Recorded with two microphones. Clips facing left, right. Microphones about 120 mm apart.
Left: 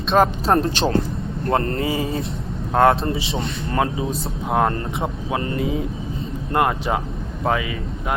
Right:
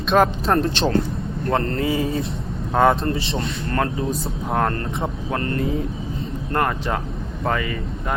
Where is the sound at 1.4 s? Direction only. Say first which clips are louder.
Left 1 dB; 25° left (ahead or behind).